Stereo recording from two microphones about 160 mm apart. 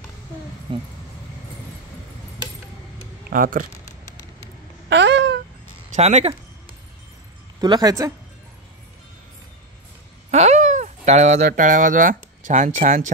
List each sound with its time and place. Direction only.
0.7 s speech: 30° right (ahead or behind)
3.3 s speech: 60° right (ahead or behind)
4.8 s babbling: 90° right
5.9 s speech: 40° right (ahead or behind)
7.6 s a woman's voice: 25° right (ahead or behind)
10.3 s speech: 45° right (ahead or behind)